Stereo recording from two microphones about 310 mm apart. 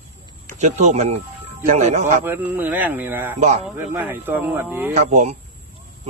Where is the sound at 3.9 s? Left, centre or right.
Centre.